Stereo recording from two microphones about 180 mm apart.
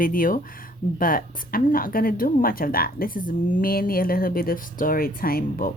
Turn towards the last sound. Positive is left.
turn(degrees=55)  # may be behind; listen again after turning